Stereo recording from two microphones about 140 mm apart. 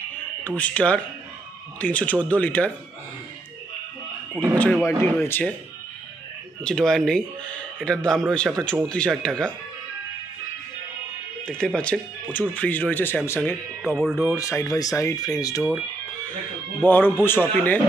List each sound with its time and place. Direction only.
0.4 s speech: 10° left (ahead or behind)
4.3 s speech: 20° right (ahead or behind)
5.2 s speech: 15° left (ahead or behind)
6.6 s speech: 5° left (ahead or behind)
11.4 s speech: 5° left (ahead or behind)
13.9 s speech: 5° right (ahead or behind)
14.3 s speech: 20° left (ahead or behind)
16.8 s speech: 15° left (ahead or behind)